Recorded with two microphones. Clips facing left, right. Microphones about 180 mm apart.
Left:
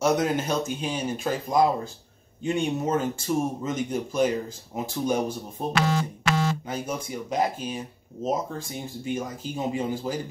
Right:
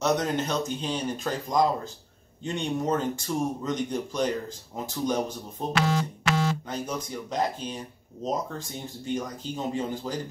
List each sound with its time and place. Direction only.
0.0 s speech: 10° left (ahead or behind)
5.8 s speech: 50° left (ahead or behind)
6.7 s speech: 10° left (ahead or behind)